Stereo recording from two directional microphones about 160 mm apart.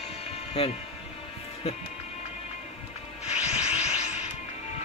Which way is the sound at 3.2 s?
40° left (ahead or behind).